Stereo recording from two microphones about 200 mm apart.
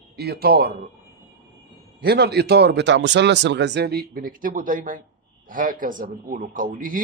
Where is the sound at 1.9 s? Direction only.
55° right (ahead or behind).